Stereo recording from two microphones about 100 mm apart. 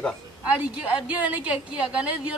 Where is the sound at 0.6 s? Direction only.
15° right (ahead or behind).